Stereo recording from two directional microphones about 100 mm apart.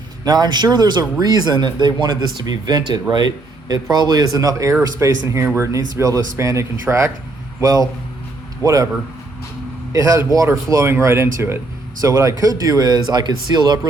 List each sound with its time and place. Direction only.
0.3 s speech: 45° right (ahead or behind)
9.9 s speech: 35° right (ahead or behind)